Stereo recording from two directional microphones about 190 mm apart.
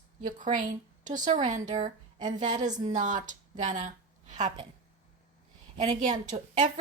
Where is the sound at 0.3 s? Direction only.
40° right (ahead or behind).